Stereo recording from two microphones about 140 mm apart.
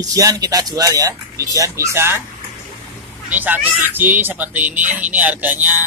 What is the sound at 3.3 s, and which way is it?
Speech, 15° right (ahead or behind).